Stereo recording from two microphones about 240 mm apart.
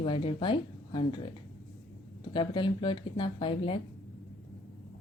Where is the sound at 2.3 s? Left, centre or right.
Centre.